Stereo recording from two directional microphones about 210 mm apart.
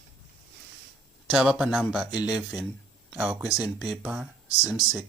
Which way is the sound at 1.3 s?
5° right (ahead or behind).